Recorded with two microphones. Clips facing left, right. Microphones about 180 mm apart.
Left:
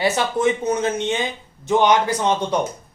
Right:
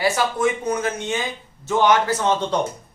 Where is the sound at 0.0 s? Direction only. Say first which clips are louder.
Left 1 dB; 20° left (ahead or behind).